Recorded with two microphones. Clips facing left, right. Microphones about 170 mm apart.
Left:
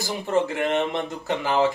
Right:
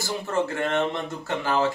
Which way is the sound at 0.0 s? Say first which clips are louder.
Left 3 dB; 15° left (ahead or behind).